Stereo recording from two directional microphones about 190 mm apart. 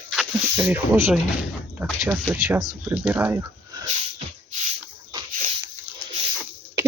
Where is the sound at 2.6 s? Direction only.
20° right (ahead or behind).